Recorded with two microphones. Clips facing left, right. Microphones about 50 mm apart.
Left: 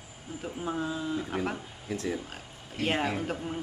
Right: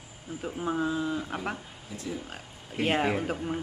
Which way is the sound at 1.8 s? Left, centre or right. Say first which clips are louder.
Left 6 dB; left.